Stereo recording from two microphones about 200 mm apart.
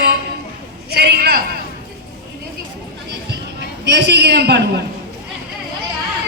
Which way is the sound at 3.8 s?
60° right (ahead or behind).